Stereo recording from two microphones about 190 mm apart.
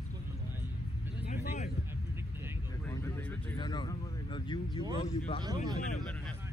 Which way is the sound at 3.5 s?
25° left (ahead or behind).